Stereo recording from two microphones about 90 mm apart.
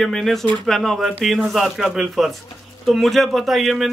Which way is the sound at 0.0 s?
Centre (ahead or behind).